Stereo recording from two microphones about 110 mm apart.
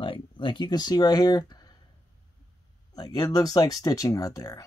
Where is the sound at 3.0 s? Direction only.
35° left (ahead or behind).